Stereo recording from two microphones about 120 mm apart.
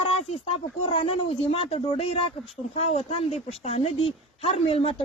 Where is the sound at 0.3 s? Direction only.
50° left (ahead or behind).